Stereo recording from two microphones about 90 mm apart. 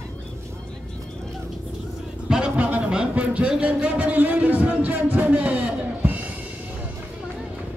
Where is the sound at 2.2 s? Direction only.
10° right (ahead or behind).